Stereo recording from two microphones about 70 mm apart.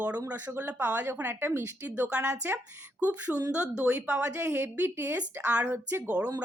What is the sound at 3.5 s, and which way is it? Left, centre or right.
Speech, centre.